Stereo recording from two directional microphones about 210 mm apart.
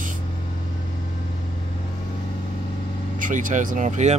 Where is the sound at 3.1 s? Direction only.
40° right (ahead or behind).